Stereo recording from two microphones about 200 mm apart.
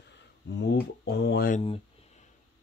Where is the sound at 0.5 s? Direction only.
60° left (ahead or behind); by 1.6 s 45° left (ahead or behind).